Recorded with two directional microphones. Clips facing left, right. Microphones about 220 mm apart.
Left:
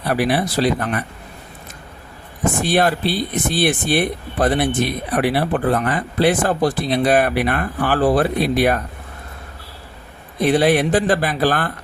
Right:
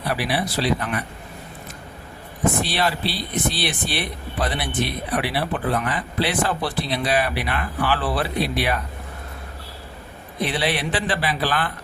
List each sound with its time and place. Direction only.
0.1 s speech: 50° left (ahead or behind)
2.6 s speech: 50° left (ahead or behind)
10.4 s speech: 45° left (ahead or behind)